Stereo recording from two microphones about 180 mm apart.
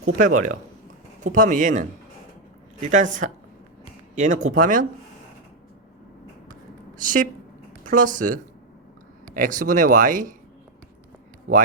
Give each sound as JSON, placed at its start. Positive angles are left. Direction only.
{"t": 0.0, "sound": "speech", "side_deg": -45}
{"t": 7.0, "sound": "speech", "side_deg": -45}